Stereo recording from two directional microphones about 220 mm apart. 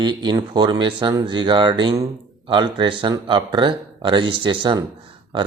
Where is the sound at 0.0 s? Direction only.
20° right (ahead or behind).